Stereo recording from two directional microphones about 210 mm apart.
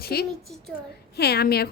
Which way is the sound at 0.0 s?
50° left (ahead or behind).